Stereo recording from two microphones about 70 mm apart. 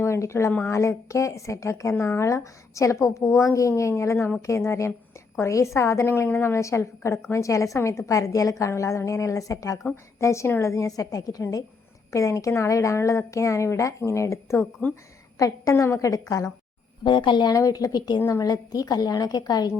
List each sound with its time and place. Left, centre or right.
0.0 s a woman's voice: left
14.6 s speech: left
15.4 s a woman's voice: left
17.0 s speech: left
17.5 s a woman's voice: left
18.3 s a woman's voice: left